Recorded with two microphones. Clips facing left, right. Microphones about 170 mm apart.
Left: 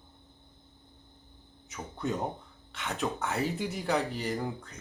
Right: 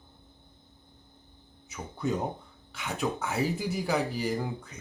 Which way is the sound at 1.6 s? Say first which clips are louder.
Right 2 dB; centre (ahead or behind).